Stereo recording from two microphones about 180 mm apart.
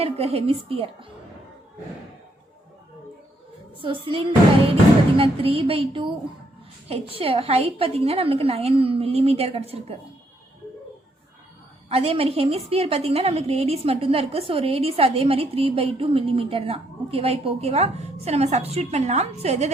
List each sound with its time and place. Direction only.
0.0 s a woman's voice: 35° right (ahead or behind)
3.8 s music: 30° right (ahead or behind)
5.1 s a woman's voice: 30° right (ahead or behind)
11.9 s a woman's voice: 35° right (ahead or behind)